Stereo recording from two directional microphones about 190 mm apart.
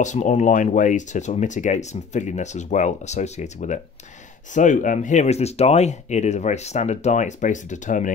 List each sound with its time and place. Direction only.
0.0 s speech: 40° left (ahead or behind)